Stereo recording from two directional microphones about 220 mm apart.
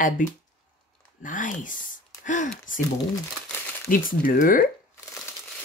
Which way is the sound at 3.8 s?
40° left (ahead or behind).